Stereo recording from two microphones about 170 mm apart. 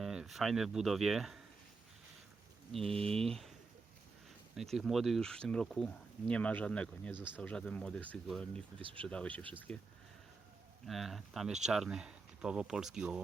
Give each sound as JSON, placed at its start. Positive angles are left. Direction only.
{"t": 0.0, "sound": "speech", "side_deg": 0}
{"t": 4.5, "sound": "speech", "side_deg": 0}
{"t": 8.8, "sound": "speech", "side_deg": -30}
{"t": 9.0, "sound": "speech", "side_deg": 5}
{"t": 10.8, "sound": "speech", "side_deg": 0}